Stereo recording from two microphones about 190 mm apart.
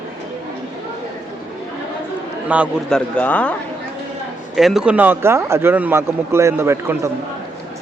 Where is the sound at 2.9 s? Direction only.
10° left (ahead or behind).